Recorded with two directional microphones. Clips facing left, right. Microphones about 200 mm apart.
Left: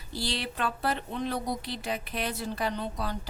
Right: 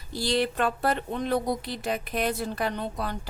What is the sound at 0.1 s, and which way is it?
Speech, 45° right (ahead or behind).